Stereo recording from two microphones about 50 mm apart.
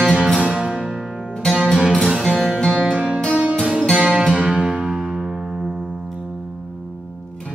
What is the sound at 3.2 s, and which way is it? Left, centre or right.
Music, right.